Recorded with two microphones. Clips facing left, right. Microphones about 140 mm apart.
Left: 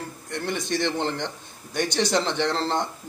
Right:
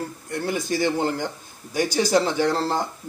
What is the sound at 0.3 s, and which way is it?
A man's voice, 5° right (ahead or behind).